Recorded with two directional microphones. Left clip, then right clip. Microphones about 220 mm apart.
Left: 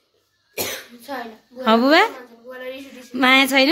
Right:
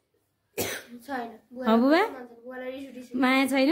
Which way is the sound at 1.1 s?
35° right (ahead or behind).